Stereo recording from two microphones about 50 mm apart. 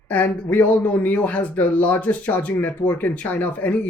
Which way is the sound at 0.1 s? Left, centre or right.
Left.